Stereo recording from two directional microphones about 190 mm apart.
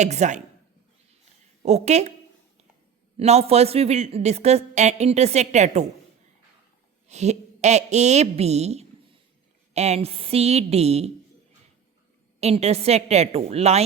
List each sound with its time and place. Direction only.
0.0 s speech: 40° right (ahead or behind)
1.6 s speech: 35° right (ahead or behind)
3.2 s speech: 35° right (ahead or behind)
7.1 s speech: 35° right (ahead or behind)
12.4 s speech: 35° right (ahead or behind)